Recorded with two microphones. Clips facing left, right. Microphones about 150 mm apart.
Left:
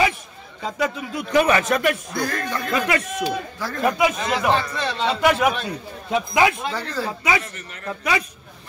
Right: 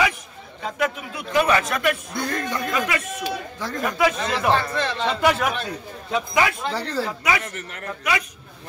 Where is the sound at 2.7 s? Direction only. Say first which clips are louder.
Left 3 dB; 30° left (ahead or behind).